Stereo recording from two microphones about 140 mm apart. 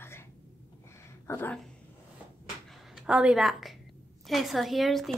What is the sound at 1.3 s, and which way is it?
Speech, 15° left (ahead or behind).